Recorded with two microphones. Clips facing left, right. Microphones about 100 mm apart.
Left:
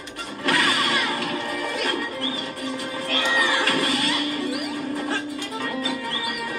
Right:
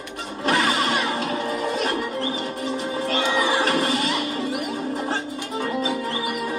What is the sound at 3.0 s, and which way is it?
Music, 25° right (ahead or behind).